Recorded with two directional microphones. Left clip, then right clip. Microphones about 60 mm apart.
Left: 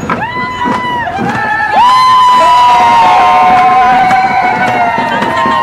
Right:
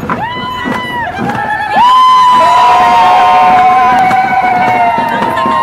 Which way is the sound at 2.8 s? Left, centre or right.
Right.